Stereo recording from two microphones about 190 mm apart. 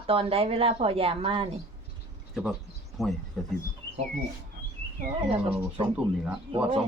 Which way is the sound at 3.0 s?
Centre (ahead or behind).